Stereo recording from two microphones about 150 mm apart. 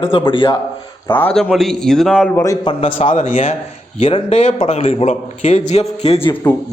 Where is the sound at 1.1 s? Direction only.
10° left (ahead or behind).